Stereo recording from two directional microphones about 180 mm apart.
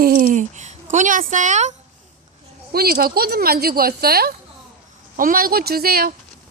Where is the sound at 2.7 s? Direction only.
55° right (ahead or behind).